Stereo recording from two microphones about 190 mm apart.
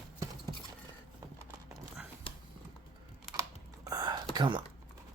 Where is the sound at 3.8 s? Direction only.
20° right (ahead or behind).